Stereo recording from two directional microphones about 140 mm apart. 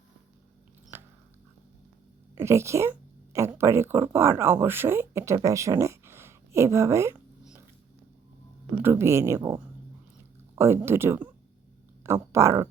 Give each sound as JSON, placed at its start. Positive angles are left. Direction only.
{"t": 0.9, "sound": "biting", "side_deg": -15}
{"t": 2.4, "sound": "speech", "side_deg": -20}
{"t": 8.7, "sound": "speech", "side_deg": -15}
{"t": 10.5, "sound": "speech", "side_deg": -20}